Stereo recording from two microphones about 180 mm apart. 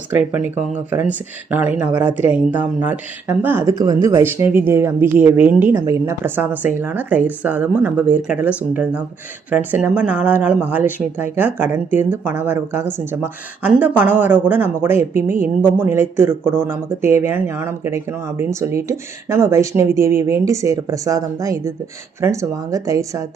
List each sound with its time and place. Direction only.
0.1 s speech: 10° right (ahead or behind)